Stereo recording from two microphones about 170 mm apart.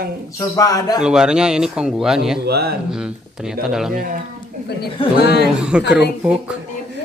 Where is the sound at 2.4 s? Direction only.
70° right (ahead or behind).